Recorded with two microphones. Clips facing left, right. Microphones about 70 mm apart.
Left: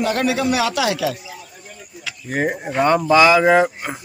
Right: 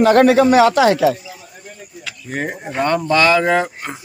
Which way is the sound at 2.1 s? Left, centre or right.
Centre.